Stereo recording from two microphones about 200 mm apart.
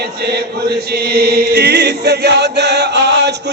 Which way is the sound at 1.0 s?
50° right (ahead or behind).